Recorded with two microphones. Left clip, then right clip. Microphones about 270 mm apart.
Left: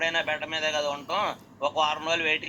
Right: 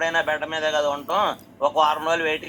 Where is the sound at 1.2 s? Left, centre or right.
Right.